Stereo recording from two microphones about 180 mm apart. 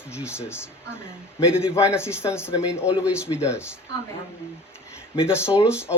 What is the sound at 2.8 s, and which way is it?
Speech, 5° right (ahead or behind).